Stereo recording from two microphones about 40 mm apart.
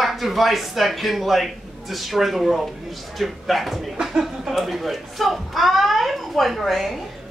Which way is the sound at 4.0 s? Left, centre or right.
Centre.